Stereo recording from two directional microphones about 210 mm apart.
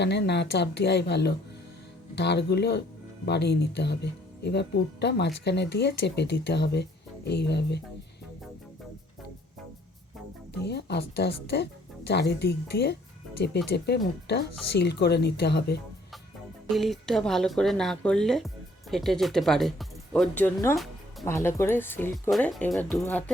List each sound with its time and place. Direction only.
0.0 s speech: 55° left (ahead or behind)
10.6 s speech: 50° left (ahead or behind)
16.6 s speech: centre (ahead or behind)